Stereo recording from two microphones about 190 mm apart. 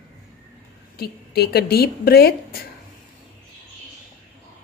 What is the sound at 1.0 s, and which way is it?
A woman's voice, 55° left (ahead or behind).